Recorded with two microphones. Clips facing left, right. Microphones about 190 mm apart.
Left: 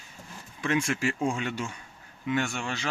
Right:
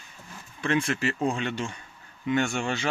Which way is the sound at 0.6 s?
10° left (ahead or behind).